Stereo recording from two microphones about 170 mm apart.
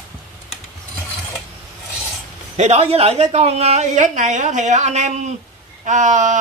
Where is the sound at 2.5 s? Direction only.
40° right (ahead or behind).